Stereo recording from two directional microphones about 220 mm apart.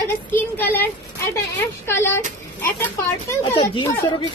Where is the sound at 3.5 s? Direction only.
20° left (ahead or behind).